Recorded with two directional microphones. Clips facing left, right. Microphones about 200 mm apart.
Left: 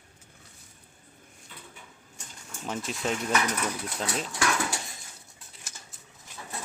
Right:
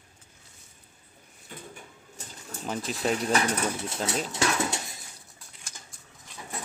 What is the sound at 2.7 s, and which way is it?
Speech, centre (ahead or behind).